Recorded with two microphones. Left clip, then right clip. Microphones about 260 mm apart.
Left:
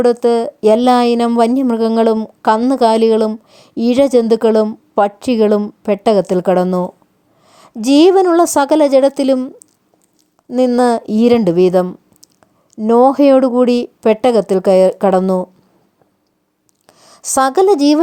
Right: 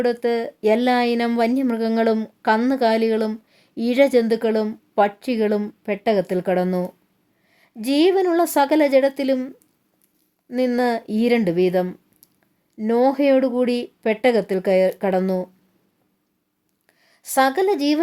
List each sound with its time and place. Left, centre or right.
0.0 s speech: left
16.8 s speech: left